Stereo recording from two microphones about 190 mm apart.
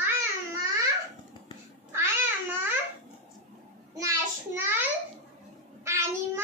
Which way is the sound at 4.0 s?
15° right (ahead or behind).